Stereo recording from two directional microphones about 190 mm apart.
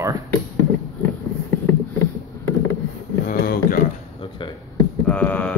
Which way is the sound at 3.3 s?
50° left (ahead or behind).